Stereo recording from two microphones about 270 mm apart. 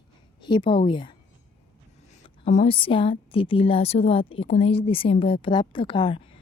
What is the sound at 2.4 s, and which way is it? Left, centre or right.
A woman's voice, left.